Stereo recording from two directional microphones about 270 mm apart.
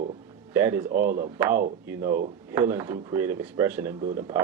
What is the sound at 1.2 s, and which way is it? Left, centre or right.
Speech, centre.